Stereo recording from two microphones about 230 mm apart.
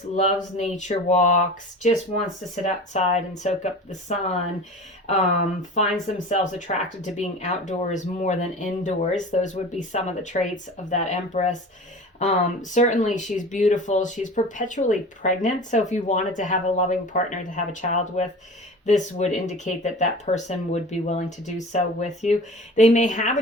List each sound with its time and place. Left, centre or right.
0.1 s speech: left
6.2 s speech: left